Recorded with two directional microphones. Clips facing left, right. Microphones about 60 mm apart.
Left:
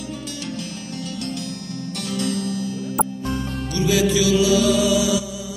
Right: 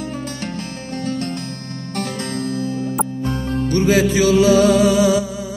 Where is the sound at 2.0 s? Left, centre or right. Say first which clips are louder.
Right 1 dB; right.